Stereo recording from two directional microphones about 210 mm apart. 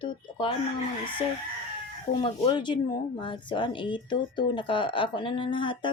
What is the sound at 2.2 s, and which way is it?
Speech, 20° left (ahead or behind).